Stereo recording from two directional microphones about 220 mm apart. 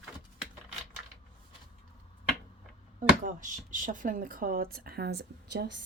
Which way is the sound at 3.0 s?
35° right (ahead or behind).